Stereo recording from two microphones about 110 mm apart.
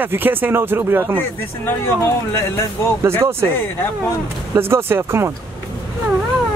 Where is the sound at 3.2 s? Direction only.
20° right (ahead or behind).